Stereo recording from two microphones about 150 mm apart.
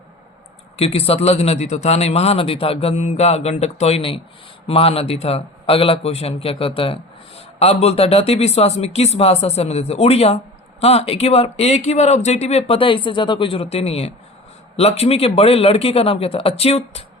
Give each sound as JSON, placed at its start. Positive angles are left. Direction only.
{"t": 0.8, "sound": "a man's voice", "side_deg": 40}